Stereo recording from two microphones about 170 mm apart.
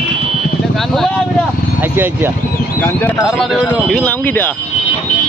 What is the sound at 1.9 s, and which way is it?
Speech, 10° right (ahead or behind).